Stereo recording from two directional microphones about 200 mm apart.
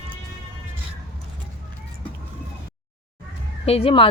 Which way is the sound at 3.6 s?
30° left (ahead or behind).